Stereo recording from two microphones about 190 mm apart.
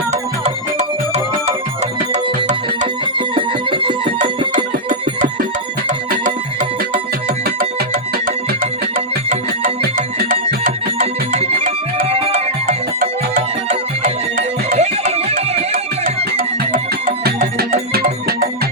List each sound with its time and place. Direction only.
0.1 s music: 35° right (ahead or behind)
2.8 s music: 25° right (ahead or behind)
4.5 s music: 45° right (ahead or behind)
9.3 s music: 50° right (ahead or behind)
11.0 s music: 35° right (ahead or behind)
15.7 s music: 45° right (ahead or behind)